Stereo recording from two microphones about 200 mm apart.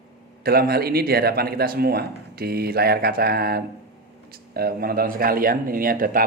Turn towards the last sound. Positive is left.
turn(degrees=-45)  # may be behind; listen again after turning